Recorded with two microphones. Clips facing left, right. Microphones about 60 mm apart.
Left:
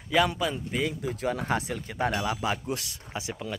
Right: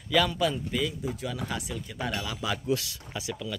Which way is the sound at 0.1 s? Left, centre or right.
Left.